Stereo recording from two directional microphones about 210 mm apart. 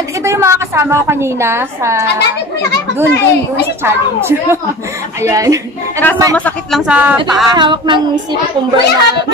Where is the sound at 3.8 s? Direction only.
10° right (ahead or behind).